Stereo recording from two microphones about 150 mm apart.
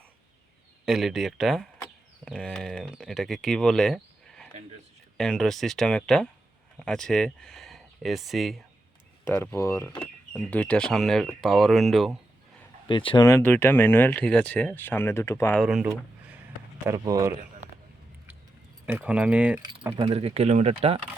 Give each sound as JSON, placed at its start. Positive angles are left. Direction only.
{"t": 0.9, "sound": "speech", "side_deg": 0}
{"t": 9.2, "sound": "speech", "side_deg": 15}
{"t": 12.9, "sound": "speech", "side_deg": 35}
{"t": 13.2, "sound": "speech", "side_deg": 15}
{"t": 15.6, "sound": "speech", "side_deg": -5}
{"t": 16.8, "sound": "a man's voice", "side_deg": -20}
{"t": 18.9, "sound": "speech", "side_deg": -10}
{"t": 19.9, "sound": "speech", "side_deg": -40}